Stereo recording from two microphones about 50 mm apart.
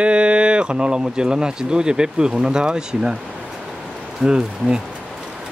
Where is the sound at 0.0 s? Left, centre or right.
Right.